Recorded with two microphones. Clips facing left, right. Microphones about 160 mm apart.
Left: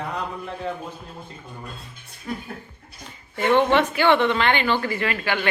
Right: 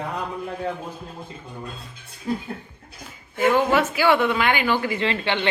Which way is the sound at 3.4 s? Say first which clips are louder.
Left 1 dB; 5° right (ahead or behind).